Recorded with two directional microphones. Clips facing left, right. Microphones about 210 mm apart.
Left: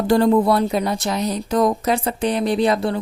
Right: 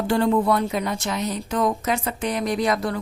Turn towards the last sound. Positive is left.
turn(degrees=30)  # may be behind; listen again after turning